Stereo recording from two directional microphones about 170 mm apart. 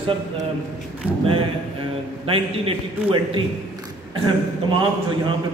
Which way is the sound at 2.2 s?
35° right (ahead or behind).